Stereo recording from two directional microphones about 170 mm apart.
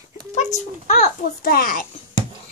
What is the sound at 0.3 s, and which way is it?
Speech, 45° left (ahead or behind).